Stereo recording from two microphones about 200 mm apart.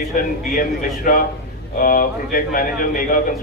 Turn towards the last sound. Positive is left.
turn(degrees=45)  # may be behind; listen again after turning